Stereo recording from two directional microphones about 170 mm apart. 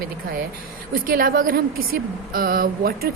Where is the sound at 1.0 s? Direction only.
60° right (ahead or behind).